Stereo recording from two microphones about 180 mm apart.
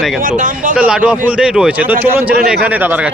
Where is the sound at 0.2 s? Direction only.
45° right (ahead or behind).